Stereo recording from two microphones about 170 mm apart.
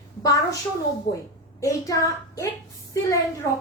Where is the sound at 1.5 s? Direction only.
20° left (ahead or behind).